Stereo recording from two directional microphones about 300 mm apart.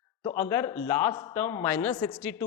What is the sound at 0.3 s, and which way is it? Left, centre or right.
A woman's voice, centre.